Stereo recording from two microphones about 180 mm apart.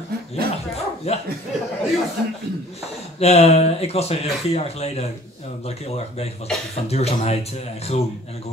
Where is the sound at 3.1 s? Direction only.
35° left (ahead or behind).